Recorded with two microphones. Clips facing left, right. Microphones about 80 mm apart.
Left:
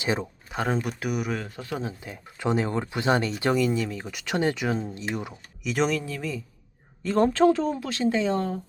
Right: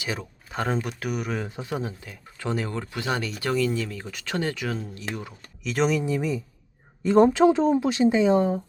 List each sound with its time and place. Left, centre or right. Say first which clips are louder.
0.0 s speech: left 5 dB; left
0.4 s speech: right 1 dB; centre
1.4 s speech: right 2 dB; centre
2.0 s speech: left 3 dB; centre
3.5 s speech: even; centre
5.6 s speech: right 1 dB; centre
6.0 s speech: right 6 dB; centre
7.5 s speech: right 6 dB; right